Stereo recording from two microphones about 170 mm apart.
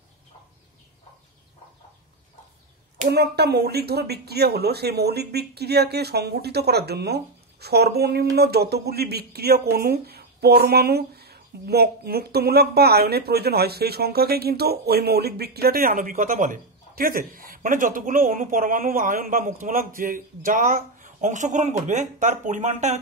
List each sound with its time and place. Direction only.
3.1 s speech: 70° right (ahead or behind); by 22.9 s 45° right (ahead or behind)